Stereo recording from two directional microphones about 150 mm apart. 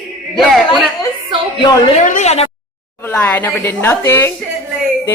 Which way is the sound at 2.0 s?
50° left (ahead or behind).